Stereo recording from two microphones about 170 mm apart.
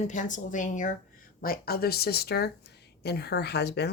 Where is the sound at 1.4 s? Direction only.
60° left (ahead or behind).